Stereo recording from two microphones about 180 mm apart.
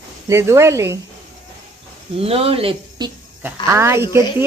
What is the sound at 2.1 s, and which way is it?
Speech, 30° right (ahead or behind).